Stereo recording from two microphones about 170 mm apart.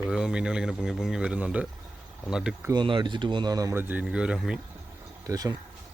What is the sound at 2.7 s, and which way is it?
Speech, 25° right (ahead or behind).